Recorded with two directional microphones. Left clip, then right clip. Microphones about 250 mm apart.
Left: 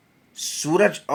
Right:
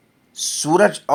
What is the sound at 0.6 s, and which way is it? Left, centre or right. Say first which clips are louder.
Speech: right 4 dB; centre.